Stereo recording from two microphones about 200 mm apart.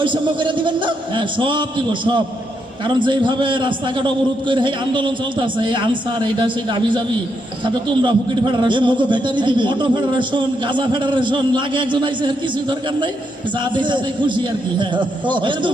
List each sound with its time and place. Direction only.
0.0 s a man's voice: 25° right (ahead or behind)
13.7 s a man's voice: 25° right (ahead or behind)